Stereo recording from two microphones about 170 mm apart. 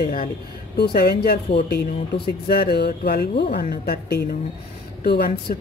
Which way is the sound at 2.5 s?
70° left (ahead or behind).